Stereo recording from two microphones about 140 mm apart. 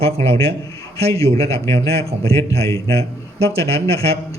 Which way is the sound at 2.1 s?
45° right (ahead or behind).